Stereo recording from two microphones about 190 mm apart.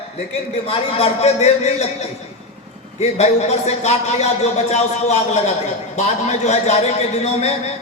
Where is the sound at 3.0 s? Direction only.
35° left (ahead or behind).